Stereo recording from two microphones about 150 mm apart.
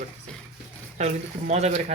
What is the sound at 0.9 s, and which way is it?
Speech, 50° right (ahead or behind).